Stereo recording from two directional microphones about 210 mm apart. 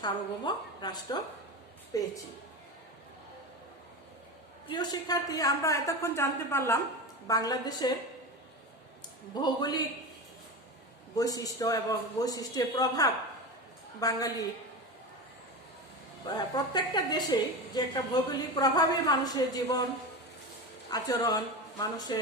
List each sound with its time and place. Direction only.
0.0 s a woman's voice: 20° left (ahead or behind)
4.7 s a woman's voice: 20° left (ahead or behind)
9.3 s a woman's voice: 20° left (ahead or behind)
11.1 s a woman's voice: 15° left (ahead or behind)
16.2 s a woman's voice: 20° left (ahead or behind)
20.9 s a woman's voice: 15° left (ahead or behind)